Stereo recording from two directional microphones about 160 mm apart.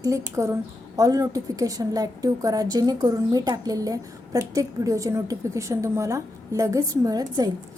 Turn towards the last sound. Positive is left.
turn(degrees=-25)  # may be behind; listen again after turning